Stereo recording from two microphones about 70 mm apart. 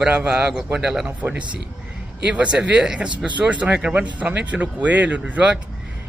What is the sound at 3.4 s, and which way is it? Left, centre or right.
Speech, centre.